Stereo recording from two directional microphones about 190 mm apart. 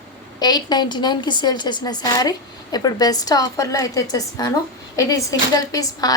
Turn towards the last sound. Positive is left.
turn(degrees=20)  # may be behind; listen again after turning